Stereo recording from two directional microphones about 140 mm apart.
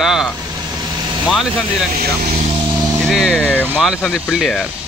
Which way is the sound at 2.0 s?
90° right.